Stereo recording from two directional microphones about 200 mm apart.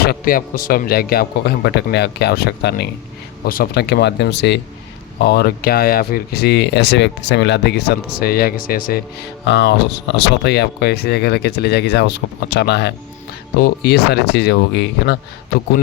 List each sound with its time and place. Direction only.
0.0 s speech: 50° left (ahead or behind)
9.5 s speech: 60° left (ahead or behind)